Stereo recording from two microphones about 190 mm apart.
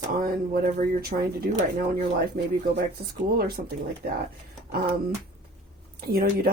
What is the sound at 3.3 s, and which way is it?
Speech, 55° right (ahead or behind).